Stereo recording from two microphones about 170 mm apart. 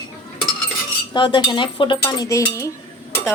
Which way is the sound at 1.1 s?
25° left (ahead or behind).